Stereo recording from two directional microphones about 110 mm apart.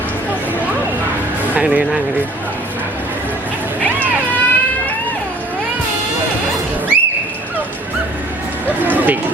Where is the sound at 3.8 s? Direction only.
15° left (ahead or behind).